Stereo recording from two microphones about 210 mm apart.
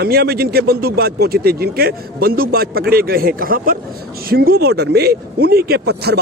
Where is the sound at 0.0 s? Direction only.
45° right (ahead or behind).